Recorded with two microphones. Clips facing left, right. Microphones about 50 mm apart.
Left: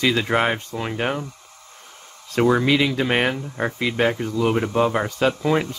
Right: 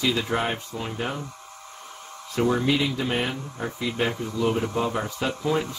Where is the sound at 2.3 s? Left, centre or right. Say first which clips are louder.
Left 5 dB; left.